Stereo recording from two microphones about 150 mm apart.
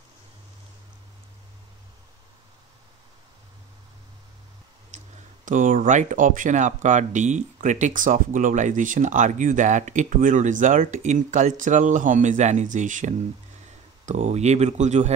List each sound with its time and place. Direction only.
4.9 s speech: 60° right (ahead or behind)